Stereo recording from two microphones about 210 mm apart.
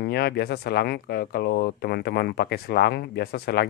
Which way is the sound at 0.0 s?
50° left (ahead or behind).